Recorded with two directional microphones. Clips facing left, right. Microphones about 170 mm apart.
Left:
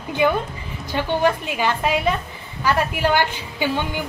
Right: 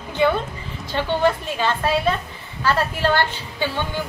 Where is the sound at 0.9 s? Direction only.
15° left (ahead or behind).